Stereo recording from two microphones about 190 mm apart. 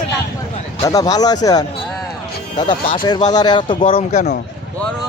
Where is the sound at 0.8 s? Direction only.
20° left (ahead or behind).